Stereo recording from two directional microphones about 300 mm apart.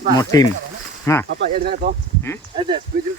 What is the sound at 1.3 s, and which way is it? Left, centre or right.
Speech, right.